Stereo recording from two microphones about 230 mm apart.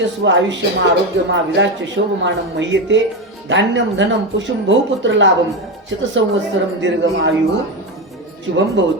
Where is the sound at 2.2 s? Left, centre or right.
Right.